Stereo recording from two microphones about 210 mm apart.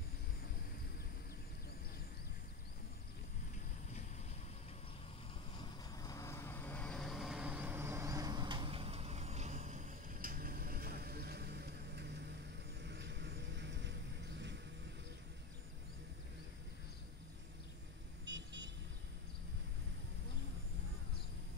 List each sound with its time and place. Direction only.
5.6 s vehicle: 15° left (ahead or behind); by 12.1 s 50° right (ahead or behind)
12.8 s a sound: 55° right (ahead or behind)
18.2 s vehicle: 60° right (ahead or behind)